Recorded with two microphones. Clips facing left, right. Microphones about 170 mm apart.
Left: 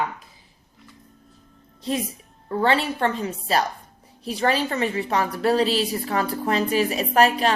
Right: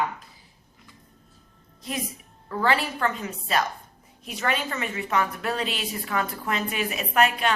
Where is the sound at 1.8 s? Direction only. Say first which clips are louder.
Left 6 dB; 30° left (ahead or behind).